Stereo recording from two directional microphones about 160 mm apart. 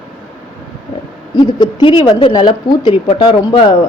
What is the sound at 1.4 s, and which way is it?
Speech, 30° left (ahead or behind).